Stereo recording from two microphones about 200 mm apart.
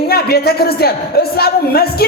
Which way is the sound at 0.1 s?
50° left (ahead or behind).